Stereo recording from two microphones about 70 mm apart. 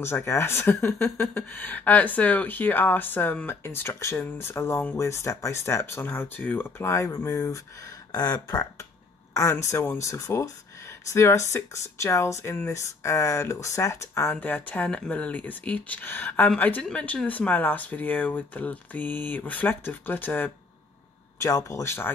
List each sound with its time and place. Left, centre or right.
0.0 s speech: left
7.0 s speech: left
8.1 s speech: left
9.3 s speech: left
12.8 s speech: left
14.3 s speech: left
21.4 s speech: left
21.8 s speech: left